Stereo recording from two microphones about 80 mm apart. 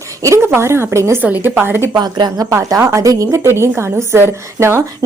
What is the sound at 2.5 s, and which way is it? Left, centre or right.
A woman's voice, right.